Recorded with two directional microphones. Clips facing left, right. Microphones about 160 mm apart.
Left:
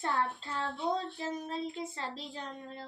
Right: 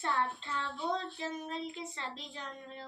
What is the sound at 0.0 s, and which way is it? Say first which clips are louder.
Speech: left 1 dB; 35° left (ahead or behind).